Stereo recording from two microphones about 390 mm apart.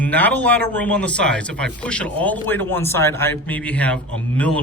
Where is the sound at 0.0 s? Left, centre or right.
Centre.